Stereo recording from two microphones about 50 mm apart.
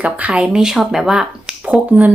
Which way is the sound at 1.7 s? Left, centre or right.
Right.